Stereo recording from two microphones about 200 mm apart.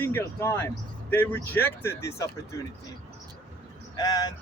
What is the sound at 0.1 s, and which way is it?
Speech, 15° left (ahead or behind).